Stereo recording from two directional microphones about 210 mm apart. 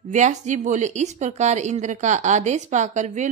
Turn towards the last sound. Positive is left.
turn(degrees=-35)  # may be behind; listen again after turning